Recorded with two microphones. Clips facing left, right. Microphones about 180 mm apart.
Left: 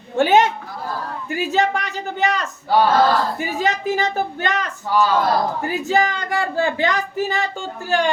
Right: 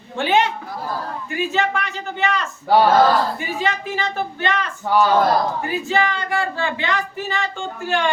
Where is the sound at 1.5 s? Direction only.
40° left (ahead or behind).